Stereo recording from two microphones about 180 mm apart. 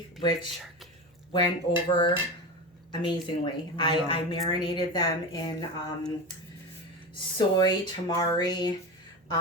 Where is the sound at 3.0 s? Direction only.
25° left (ahead or behind).